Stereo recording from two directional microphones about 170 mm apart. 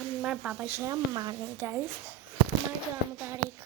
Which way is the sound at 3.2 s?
15° right (ahead or behind).